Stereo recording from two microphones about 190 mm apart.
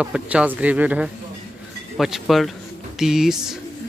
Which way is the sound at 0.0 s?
5° right (ahead or behind).